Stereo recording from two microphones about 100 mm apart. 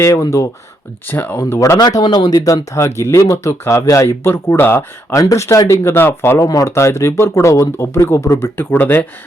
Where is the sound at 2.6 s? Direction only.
30° left (ahead or behind).